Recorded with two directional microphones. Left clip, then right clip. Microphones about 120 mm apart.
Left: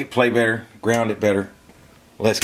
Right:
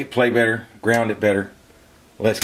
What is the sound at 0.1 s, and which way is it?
Speech, 30° left (ahead or behind).